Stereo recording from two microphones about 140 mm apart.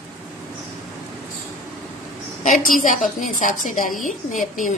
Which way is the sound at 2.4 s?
65° left (ahead or behind).